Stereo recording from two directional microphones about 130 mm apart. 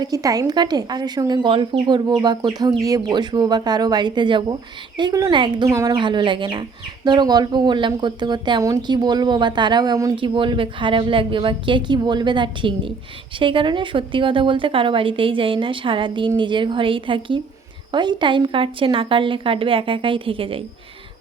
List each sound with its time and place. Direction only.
0.0 s speech: 30° right (ahead or behind)
5.6 s speech: 25° right (ahead or behind)
5.9 s speech: 40° right (ahead or behind)
10.2 s speech: 40° right (ahead or behind)